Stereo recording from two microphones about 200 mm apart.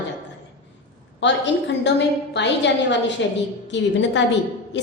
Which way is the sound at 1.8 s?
60° left (ahead or behind).